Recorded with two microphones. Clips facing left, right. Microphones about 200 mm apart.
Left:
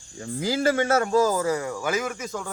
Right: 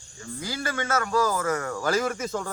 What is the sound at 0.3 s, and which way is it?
Speech, 90° left.